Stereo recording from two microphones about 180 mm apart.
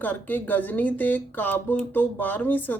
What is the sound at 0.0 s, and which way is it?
Speech, 10° left (ahead or behind).